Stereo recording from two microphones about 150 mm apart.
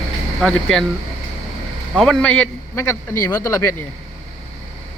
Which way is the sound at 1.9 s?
5° left (ahead or behind).